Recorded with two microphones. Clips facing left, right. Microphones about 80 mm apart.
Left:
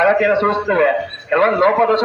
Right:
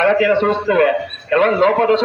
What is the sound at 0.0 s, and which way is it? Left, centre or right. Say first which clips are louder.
A man's voice: even; left.